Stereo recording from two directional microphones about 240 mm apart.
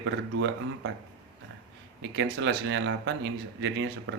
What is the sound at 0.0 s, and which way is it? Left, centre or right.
Speech, right.